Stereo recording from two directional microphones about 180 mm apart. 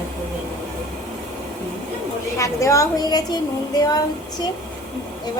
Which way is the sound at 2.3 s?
15° left (ahead or behind).